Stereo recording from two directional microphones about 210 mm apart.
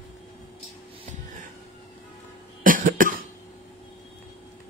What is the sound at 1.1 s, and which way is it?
Music, 35° right (ahead or behind).